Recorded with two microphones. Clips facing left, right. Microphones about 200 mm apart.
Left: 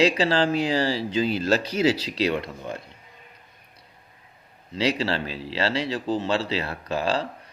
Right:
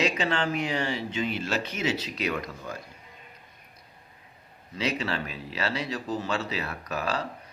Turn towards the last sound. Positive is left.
turn(degrees=30)  # may be behind; listen again after turning